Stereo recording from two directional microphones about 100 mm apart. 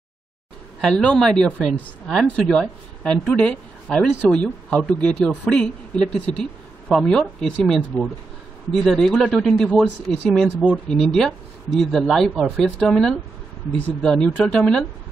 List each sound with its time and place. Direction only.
0.7 s speech: 5° left (ahead or behind)